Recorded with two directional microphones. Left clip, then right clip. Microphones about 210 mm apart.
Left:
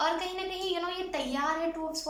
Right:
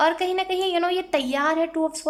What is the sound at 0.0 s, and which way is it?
A woman's voice, 45° right (ahead or behind).